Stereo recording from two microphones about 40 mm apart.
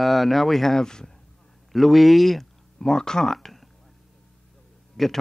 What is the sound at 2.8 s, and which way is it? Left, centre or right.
Speech, centre.